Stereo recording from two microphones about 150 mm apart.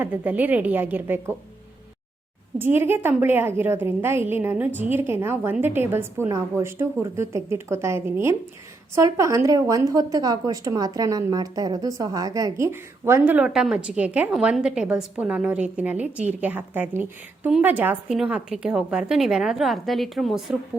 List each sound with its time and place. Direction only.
0.0 s a woman's voice: 10° right (ahead or behind)
2.6 s a woman's voice: 15° right (ahead or behind)